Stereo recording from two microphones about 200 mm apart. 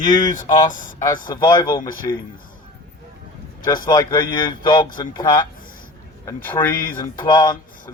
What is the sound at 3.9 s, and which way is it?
Speech, 20° left (ahead or behind).